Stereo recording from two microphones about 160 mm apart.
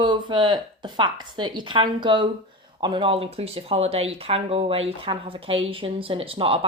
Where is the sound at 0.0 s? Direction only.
30° right (ahead or behind).